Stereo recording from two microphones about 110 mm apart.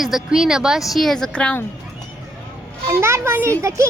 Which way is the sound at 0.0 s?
5° right (ahead or behind).